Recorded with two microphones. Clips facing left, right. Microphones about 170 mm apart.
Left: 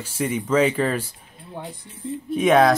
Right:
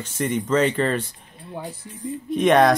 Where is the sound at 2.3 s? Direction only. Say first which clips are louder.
Even; 5° left (ahead or behind).